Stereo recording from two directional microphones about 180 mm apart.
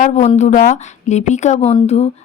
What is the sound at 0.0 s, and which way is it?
Speech, 40° left (ahead or behind).